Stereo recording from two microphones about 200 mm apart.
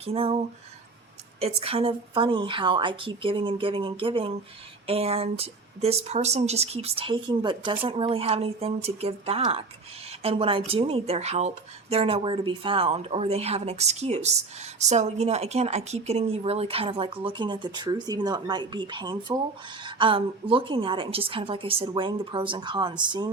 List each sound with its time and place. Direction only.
0.0 s speech: 30° right (ahead or behind)
1.4 s speech: 30° right (ahead or behind)